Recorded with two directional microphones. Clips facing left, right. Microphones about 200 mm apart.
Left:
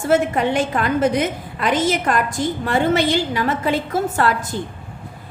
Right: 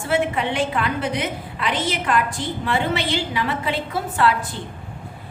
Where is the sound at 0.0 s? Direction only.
45° left (ahead or behind).